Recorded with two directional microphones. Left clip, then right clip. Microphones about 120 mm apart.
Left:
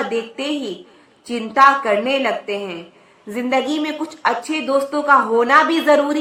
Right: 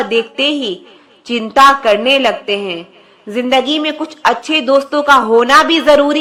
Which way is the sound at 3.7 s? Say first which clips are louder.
Right 6 dB; 20° right (ahead or behind).